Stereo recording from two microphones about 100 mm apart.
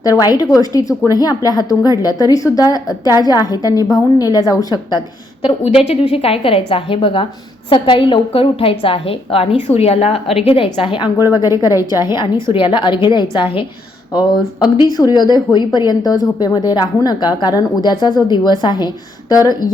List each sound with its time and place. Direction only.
0.0 s a woman's voice: 35° left (ahead or behind)
5.9 s a woman's voice: 80° left
9.7 s a woman's voice: 90° left; by 11.1 s 55° left (ahead or behind)
11.3 s a woman's voice: 40° left (ahead or behind)
11.7 s a woman's voice: 25° right (ahead or behind)
12.0 s speech: 50° left (ahead or behind)
14.1 s speech: 45° left (ahead or behind)
19.3 s a woman's voice: 35° left (ahead or behind)